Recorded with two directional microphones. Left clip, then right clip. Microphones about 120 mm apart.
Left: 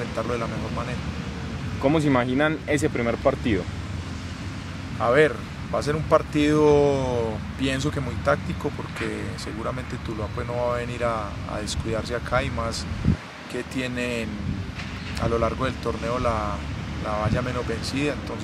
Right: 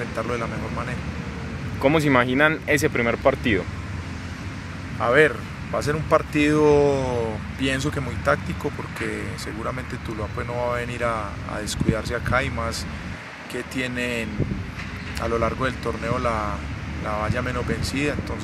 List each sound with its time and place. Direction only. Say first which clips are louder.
0.2 s speech: right 1 dB; 10° right (ahead or behind)
1.8 s speech: right 3 dB; 30° right (ahead or behind)
5.0 s speech: right 1 dB; 5° right (ahead or behind)
10.5 s speech: even; 5° right (ahead or behind)
13.7 s speech: right 2 dB; 5° right (ahead or behind)